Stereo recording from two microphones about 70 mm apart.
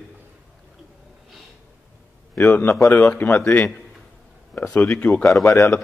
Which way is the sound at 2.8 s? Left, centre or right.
Left.